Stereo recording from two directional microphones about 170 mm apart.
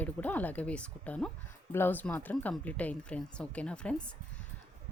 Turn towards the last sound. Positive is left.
turn(degrees=5)  # may be behind; listen again after turning